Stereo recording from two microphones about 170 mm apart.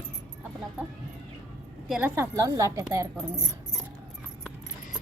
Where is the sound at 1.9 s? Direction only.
10° right (ahead or behind).